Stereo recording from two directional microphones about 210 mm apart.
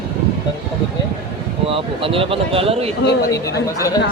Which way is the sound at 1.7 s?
25° right (ahead or behind).